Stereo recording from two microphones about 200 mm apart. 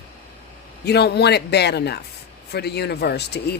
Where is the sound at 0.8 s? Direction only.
55° left (ahead or behind).